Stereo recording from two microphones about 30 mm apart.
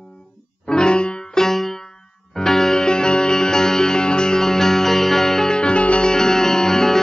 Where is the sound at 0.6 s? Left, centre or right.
Left.